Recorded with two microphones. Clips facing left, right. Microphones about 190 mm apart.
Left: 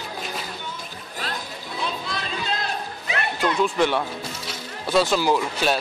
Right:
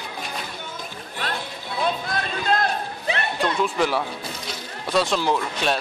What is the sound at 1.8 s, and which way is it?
Chatter, 50° right (ahead or behind).